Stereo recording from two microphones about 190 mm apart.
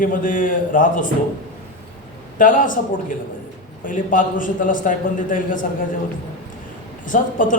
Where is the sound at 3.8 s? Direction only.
45° left (ahead or behind).